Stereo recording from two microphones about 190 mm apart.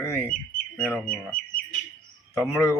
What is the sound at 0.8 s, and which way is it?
Speech, 5° left (ahead or behind).